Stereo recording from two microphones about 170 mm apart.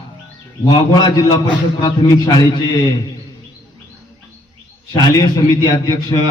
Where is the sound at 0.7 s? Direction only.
25° left (ahead or behind).